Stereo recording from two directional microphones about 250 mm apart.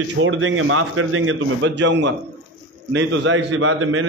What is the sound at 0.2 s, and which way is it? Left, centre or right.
A man's voice, right.